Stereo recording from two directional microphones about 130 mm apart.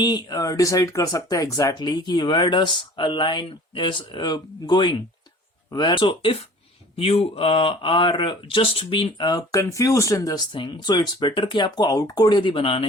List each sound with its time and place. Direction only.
0.0 s speech: 30° left (ahead or behind)
10.5 s speech: 40° left (ahead or behind)